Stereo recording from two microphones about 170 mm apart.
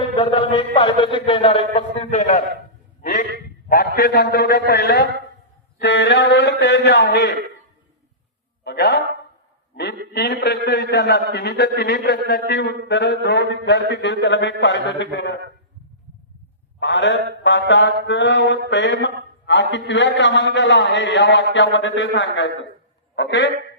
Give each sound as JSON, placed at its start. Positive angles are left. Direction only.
{"t": 0.2, "sound": "a man's voice", "side_deg": 30}
{"t": 3.7, "sound": "a man's voice", "side_deg": 60}
{"t": 5.8, "sound": "a man's voice", "side_deg": 90}
{"t": 8.6, "sound": "speech", "side_deg": 85}
{"t": 10.1, "sound": "a man's voice", "side_deg": 75}
{"t": 12.9, "sound": "a man's voice", "side_deg": 90}
{"t": 16.8, "sound": "a man's voice", "side_deg": 90}